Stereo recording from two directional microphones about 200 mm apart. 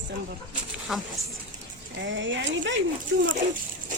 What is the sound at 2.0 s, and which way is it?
Speech, 65° right (ahead or behind).